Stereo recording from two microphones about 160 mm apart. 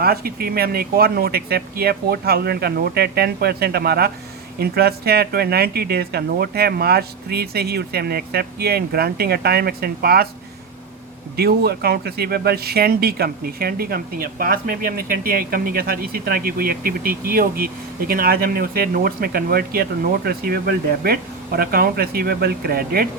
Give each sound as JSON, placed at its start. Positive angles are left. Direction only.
{"t": 0.0, "sound": "speech", "side_deg": -70}
{"t": 11.3, "sound": "speech", "side_deg": -75}